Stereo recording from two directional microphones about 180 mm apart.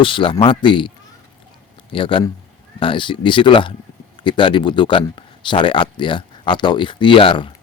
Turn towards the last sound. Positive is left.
turn(degrees=30)  # may be behind; listen again after turning